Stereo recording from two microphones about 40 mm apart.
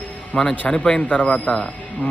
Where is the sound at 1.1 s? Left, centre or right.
Left.